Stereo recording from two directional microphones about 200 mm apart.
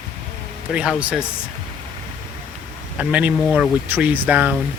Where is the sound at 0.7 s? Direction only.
5° right (ahead or behind).